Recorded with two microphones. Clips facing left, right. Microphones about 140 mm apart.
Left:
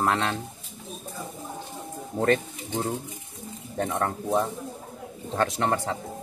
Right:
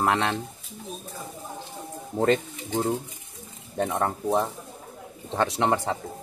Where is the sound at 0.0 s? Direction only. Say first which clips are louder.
Right 1 dB; 20° right (ahead or behind).